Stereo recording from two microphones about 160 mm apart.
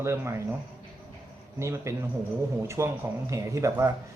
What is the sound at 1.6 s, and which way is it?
A man's voice, 20° right (ahead or behind).